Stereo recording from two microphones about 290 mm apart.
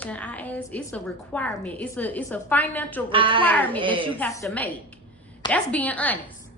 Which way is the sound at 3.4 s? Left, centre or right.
Centre.